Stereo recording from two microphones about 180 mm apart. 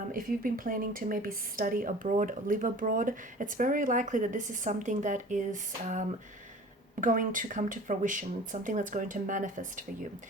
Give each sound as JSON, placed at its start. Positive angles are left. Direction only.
{"t": 0.1, "sound": "a woman's voice", "side_deg": -50}